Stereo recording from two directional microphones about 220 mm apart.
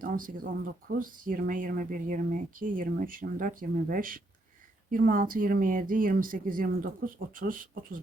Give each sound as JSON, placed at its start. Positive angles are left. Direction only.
{"t": 0.0, "sound": "speech", "side_deg": -40}